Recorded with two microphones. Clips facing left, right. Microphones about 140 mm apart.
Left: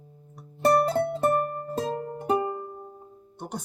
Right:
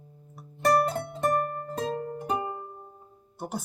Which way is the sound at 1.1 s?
30° left (ahead or behind).